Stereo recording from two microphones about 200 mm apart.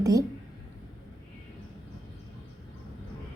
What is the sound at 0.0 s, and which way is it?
Speech, 15° right (ahead or behind).